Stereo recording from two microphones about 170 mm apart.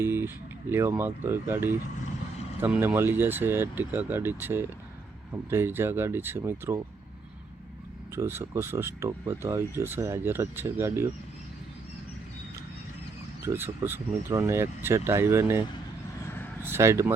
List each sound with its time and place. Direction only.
0.0 s a sound: 15° right (ahead or behind)
0.7 s speech: 15° right (ahead or behind)
8.1 s speech: 15° right (ahead or behind)
13.4 s speech: 15° right (ahead or behind)
16.6 s speech: 15° right (ahead or behind)